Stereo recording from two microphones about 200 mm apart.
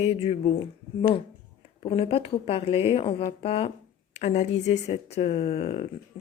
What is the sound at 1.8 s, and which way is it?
A woman's voice, 25° left (ahead or behind).